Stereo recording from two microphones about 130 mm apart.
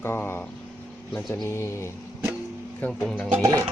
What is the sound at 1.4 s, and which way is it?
Speech, 20° left (ahead or behind).